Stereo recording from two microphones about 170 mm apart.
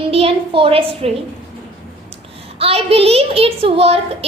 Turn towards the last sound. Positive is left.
turn(degrees=-35)  # may be behind; listen again after turning